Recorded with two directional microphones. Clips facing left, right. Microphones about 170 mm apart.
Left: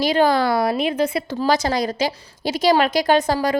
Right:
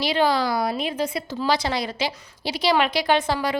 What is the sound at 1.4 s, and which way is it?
A woman's voice, 45° left (ahead or behind).